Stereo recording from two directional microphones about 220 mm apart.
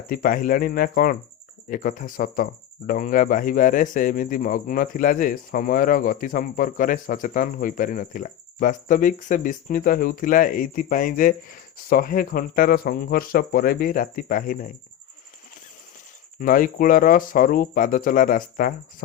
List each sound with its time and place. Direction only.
0.1 s speech: 40° left (ahead or behind)
16.4 s speech: 40° left (ahead or behind)